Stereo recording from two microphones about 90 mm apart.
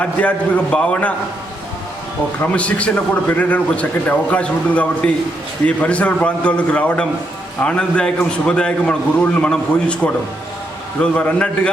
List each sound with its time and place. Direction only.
0.0 s a man's voice: 15° left (ahead or behind)
2.4 s a man's voice: 15° left (ahead or behind)